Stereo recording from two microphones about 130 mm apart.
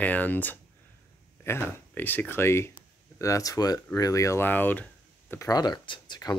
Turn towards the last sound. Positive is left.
turn(degrees=30)  # may be behind; listen again after turning